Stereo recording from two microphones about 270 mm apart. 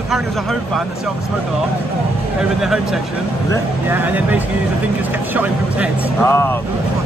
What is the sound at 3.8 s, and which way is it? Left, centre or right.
Speech, centre.